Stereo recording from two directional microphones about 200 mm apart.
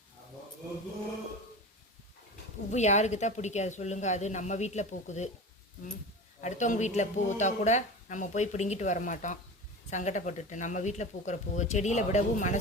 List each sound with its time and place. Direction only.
2.6 s speech: 35° left (ahead or behind)
6.4 s speech: 35° left (ahead or behind)